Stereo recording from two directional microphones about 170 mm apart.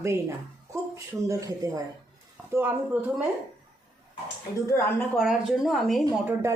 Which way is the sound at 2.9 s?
10° right (ahead or behind).